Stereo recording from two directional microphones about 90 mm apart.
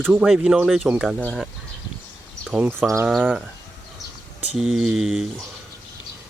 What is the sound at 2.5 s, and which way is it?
Speech, 20° right (ahead or behind).